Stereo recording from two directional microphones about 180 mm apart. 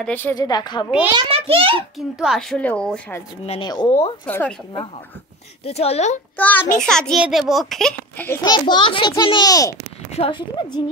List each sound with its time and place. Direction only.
0.0 s a child's voice: 10° left (ahead or behind)
0.4 s a child's voice: 25° left (ahead or behind)
1.1 s a child's voice: 30° right (ahead or behind)
2.0 s a child's voice: centre (ahead or behind)
3.4 s a child's voice: 25° left (ahead or behind)
4.3 s a child's voice: 10° left (ahead or behind)
5.7 s speech: 35° left (ahead or behind)
6.3 s a child's voice: 10° left (ahead or behind)
8.3 s a child's voice: 25° left (ahead or behind)